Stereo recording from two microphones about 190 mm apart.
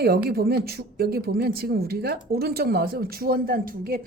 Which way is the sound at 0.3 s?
55° right (ahead or behind).